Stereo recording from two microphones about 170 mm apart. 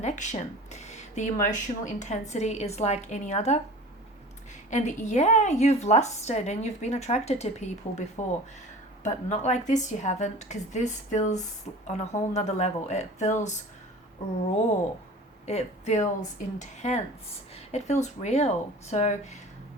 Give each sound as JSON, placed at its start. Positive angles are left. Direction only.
{"t": 0.0, "sound": "speech", "side_deg": 45}
{"t": 4.7, "sound": "speech", "side_deg": 45}
{"t": 15.4, "sound": "speech", "side_deg": 40}